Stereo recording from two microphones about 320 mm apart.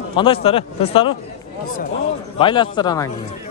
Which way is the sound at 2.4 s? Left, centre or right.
Centre.